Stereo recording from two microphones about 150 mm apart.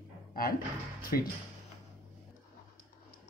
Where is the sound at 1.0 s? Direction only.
80° left.